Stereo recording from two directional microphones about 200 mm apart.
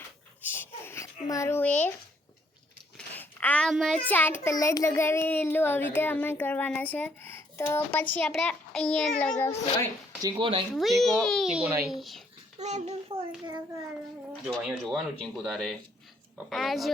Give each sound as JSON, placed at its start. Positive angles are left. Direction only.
{"t": 0.4, "sound": "a sound", "side_deg": 10}
{"t": 3.2, "sound": "a child's voice", "side_deg": 10}
{"t": 10.2, "sound": "speech", "side_deg": -25}
{"t": 10.8, "sound": "a child's voice", "side_deg": 0}
{"t": 12.5, "sound": "a child's voice", "side_deg": -35}
{"t": 14.4, "sound": "a child's voice", "side_deg": 0}